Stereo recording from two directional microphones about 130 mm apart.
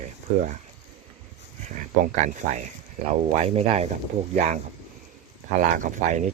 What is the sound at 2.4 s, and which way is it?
Speech, 60° right (ahead or behind).